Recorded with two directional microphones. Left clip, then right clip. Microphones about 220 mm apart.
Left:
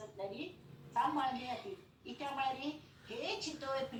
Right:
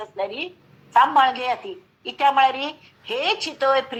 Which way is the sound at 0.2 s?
50° right (ahead or behind).